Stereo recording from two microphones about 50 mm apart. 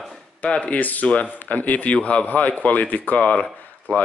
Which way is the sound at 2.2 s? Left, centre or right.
Left.